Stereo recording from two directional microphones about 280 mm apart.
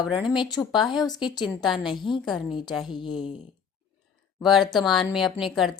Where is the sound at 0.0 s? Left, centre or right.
Centre.